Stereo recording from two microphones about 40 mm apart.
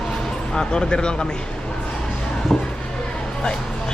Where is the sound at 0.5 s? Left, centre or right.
Centre.